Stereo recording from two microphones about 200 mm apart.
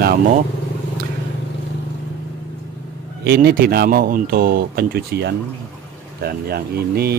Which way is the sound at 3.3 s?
50° right (ahead or behind).